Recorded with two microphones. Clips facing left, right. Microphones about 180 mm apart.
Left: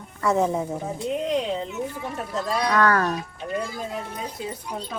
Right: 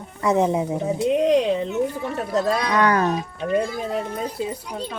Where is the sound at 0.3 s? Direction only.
20° right (ahead or behind).